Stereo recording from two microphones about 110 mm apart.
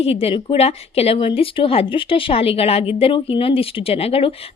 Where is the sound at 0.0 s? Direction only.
65° left (ahead or behind).